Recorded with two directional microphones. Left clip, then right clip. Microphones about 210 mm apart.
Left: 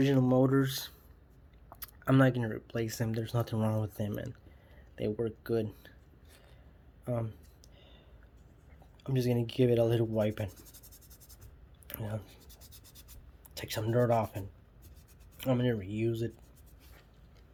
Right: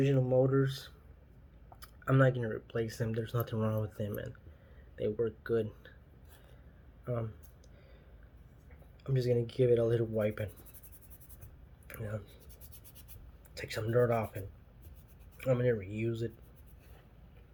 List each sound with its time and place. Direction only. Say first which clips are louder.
0.0 s speech: left 1 dB; 50° left (ahead or behind); by 5.9 s 30° left (ahead or behind)
7.0 s speech: left 2 dB; 35° left (ahead or behind)
9.0 s speech: right 1 dB; 35° left (ahead or behind)
11.9 s a sound: left 1 dB; 35° left (ahead or behind)
13.5 s speech: even; 40° left (ahead or behind)